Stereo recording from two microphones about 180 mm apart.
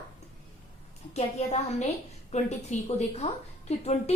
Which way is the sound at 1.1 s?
40° left (ahead or behind).